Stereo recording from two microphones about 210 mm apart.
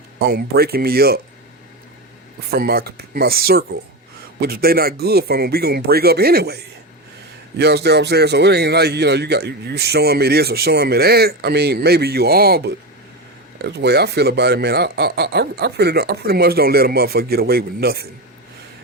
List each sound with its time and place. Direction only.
0.2 s a man's voice: 50° right (ahead or behind)
2.5 s a man's voice: 45° right (ahead or behind)